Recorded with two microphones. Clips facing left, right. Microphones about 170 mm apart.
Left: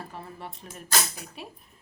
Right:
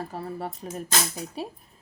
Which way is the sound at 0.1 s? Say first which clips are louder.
Right 7 dB; 40° right (ahead or behind).